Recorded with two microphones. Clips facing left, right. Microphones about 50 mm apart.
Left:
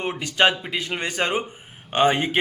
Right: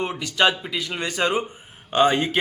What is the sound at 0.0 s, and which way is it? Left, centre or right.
A man's voice, left.